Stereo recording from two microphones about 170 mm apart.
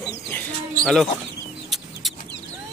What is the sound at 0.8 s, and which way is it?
Speech, centre (ahead or behind).